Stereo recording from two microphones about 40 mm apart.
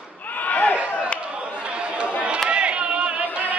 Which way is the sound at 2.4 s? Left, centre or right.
Right.